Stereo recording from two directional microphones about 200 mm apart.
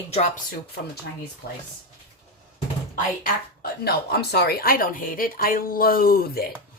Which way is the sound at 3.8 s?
50° left (ahead or behind).